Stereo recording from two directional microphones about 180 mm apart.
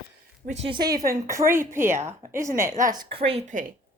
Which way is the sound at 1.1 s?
15° right (ahead or behind).